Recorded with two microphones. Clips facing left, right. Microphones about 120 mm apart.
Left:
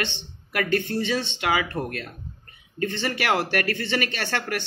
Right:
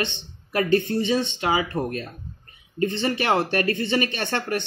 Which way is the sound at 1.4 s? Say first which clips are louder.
Right 1 dB; 20° right (ahead or behind).